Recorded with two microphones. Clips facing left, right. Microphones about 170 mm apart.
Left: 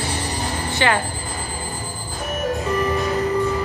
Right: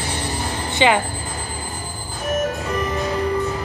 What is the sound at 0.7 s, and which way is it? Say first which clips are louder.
Speech: right 4 dB; 15° right (ahead or behind).